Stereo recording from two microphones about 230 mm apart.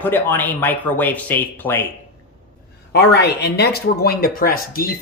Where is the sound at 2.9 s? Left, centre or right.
Left.